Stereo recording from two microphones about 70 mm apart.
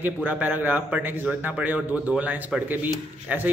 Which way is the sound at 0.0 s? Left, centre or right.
Right.